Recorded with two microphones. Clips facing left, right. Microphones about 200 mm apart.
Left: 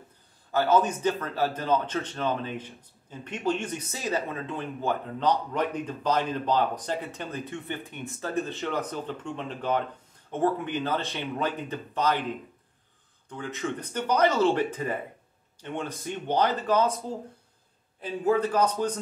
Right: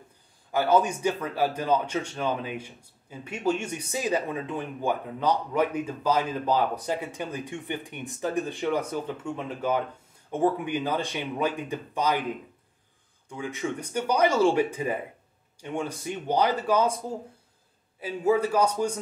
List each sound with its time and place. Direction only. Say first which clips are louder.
0.5 s a man's voice: even; 15° right (ahead or behind)
13.3 s a man's voice: right 1 dB; 10° right (ahead or behind)
18.0 s a man's voice: right 1 dB; 10° right (ahead or behind)